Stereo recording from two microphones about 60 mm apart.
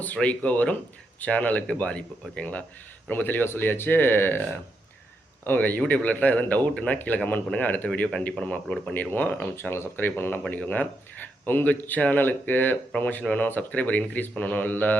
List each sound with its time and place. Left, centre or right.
0.0 s speech: left
3.1 s speech: left
5.5 s speech: left